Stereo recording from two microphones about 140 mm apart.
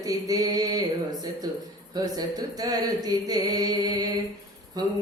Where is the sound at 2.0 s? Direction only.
25° right (ahead or behind).